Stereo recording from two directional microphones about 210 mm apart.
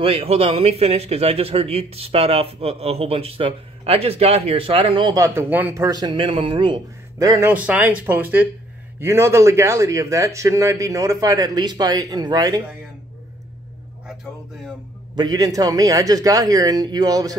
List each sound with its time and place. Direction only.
0.0 s a man's voice: 30° right (ahead or behind)
15.1 s a man's voice: 20° right (ahead or behind)